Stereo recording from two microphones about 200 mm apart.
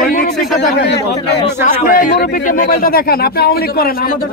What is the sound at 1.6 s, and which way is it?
A man's voice, 40° left (ahead or behind).